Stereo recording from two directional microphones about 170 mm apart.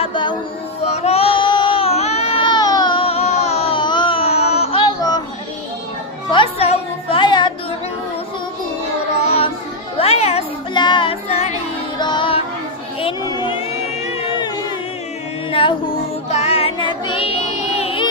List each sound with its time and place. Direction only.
0.0 s music: 30° left (ahead or behind)
0.9 s child singing: 40° left (ahead or behind)
6.3 s music: 35° left (ahead or behind)
9.1 s child singing: 35° left (ahead or behind)
10.0 s music: 40° left (ahead or behind)
10.8 s music: 25° left (ahead or behind)
11.9 s music: 25° left (ahead or behind)
13.2 s a sound: 25° left (ahead or behind)
14.3 s music: 25° left (ahead or behind)
16.3 s child singing: 40° left (ahead or behind)